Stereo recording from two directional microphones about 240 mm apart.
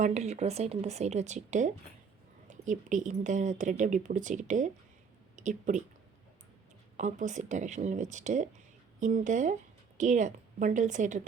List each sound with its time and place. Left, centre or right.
0.0 s speech: right
6.9 s speech: right